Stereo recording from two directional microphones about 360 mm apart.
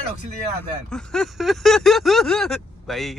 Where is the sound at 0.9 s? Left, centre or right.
Centre.